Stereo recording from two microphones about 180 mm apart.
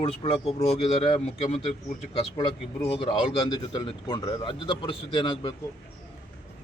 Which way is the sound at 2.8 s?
30° left (ahead or behind).